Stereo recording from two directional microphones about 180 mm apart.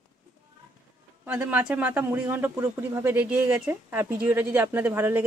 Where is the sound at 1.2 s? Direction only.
10° right (ahead or behind).